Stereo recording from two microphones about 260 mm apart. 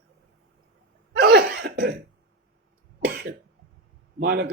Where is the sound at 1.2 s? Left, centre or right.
Right.